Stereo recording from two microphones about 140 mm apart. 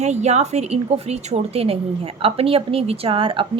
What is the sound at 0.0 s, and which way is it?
A woman's voice, 55° right (ahead or behind).